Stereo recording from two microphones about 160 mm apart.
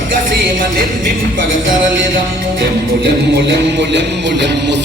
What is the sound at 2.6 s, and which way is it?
Music, 90° right.